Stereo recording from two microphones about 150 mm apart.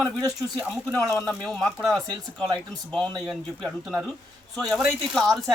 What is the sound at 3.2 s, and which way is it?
Speech, centre (ahead or behind).